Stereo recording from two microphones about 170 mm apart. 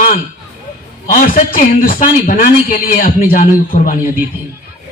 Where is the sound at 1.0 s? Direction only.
55° left (ahead or behind).